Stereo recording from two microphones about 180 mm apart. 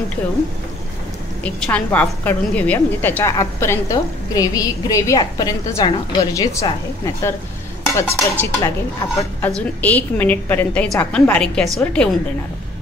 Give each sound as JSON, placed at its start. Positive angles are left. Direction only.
{"t": 1.4, "sound": "a woman's voice", "side_deg": 5}
{"t": 7.8, "sound": "a woman's voice", "side_deg": 15}